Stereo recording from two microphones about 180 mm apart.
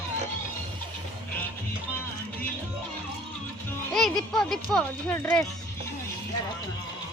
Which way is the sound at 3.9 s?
Centre (ahead or behind).